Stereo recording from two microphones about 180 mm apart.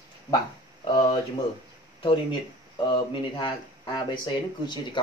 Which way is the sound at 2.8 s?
25° left (ahead or behind).